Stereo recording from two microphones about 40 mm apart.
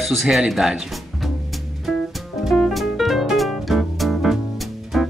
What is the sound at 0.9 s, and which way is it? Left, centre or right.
Music, centre.